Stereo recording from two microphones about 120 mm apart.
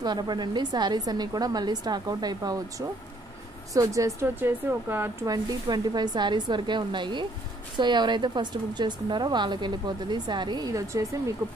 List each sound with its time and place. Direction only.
0.0 s a woman's voice: 35° right (ahead or behind)
3.7 s a woman's voice: 25° right (ahead or behind)
5.2 s a woman's voice: 35° right (ahead or behind)